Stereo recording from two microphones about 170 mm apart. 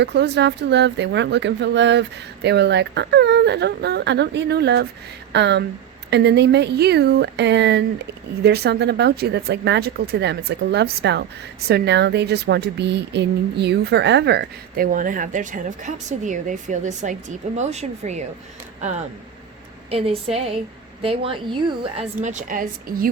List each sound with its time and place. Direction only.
0.0 s speech: 85° right
8.4 s speech: 75° right (ahead or behind)
14.8 s speech: 55° right (ahead or behind)
19.9 s a woman's voice: 35° right (ahead or behind)
22.2 s speech: 45° right (ahead or behind)